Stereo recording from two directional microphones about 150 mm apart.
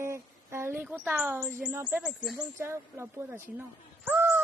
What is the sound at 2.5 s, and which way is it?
Speech, 15° right (ahead or behind).